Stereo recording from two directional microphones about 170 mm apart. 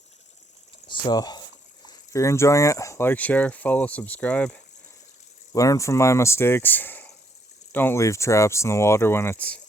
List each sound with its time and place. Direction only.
0.9 s a sound: 25° left (ahead or behind)
1.9 s speech: 20° left (ahead or behind)
5.5 s speech: 20° left (ahead or behind)